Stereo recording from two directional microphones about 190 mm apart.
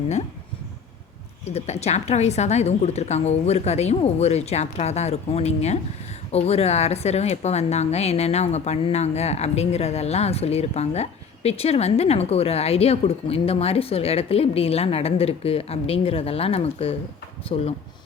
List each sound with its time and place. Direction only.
1.5 s a woman's voice: 35° left (ahead or behind)